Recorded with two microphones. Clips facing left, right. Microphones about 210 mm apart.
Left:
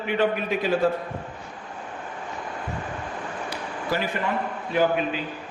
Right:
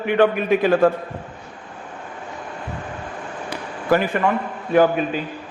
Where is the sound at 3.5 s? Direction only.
55° right (ahead or behind).